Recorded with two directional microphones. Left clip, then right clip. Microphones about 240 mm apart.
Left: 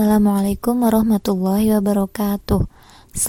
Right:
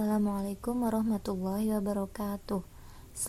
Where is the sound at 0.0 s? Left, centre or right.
Left.